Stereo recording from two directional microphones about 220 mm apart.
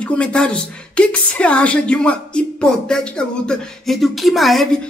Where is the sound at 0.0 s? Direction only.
5° left (ahead or behind).